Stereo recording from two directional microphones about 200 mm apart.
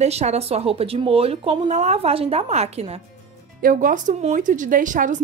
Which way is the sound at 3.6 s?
45° right (ahead or behind).